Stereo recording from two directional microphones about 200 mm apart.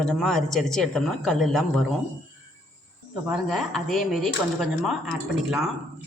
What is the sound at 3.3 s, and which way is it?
Speech, centre (ahead or behind).